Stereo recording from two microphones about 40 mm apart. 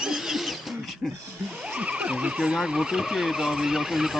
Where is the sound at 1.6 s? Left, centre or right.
Right.